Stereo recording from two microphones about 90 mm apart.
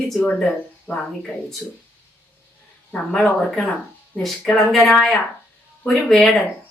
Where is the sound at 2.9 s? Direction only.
5° left (ahead or behind).